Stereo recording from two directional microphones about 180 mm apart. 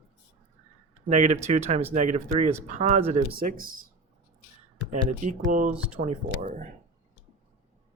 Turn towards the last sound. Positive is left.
turn(degrees=-45)  # may be behind; listen again after turning